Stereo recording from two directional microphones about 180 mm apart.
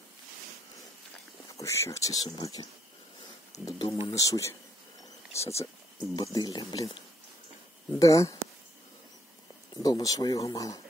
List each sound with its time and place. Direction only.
1.6 s speech: 15° left (ahead or behind)
3.6 s speech: 20° left (ahead or behind)
8.0 s speech: 20° left (ahead or behind)
9.8 s speech: 20° left (ahead or behind)